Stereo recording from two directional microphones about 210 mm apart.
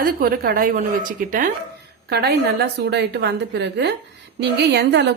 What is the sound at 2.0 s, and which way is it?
A woman's voice, 50° right (ahead or behind).